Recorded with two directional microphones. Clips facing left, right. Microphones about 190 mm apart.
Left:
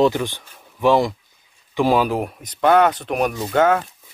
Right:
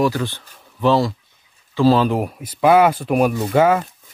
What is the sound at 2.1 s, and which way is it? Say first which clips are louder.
Speech: right 2 dB; centre (ahead or behind).